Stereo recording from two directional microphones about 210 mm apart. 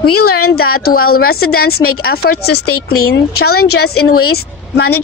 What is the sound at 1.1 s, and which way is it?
Speech, 45° left (ahead or behind).